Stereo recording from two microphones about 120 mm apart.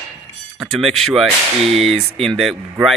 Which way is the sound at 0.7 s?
5° left (ahead or behind).